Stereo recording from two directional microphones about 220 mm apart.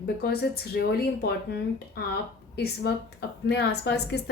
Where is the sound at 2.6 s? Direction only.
50° left (ahead or behind).